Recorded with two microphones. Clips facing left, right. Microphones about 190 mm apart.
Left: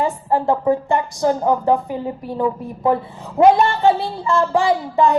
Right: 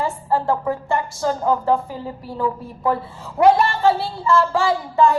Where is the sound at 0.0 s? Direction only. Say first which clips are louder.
Left 3 dB; 20° left (ahead or behind).